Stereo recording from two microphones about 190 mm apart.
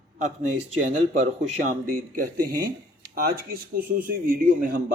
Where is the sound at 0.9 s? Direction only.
40° right (ahead or behind).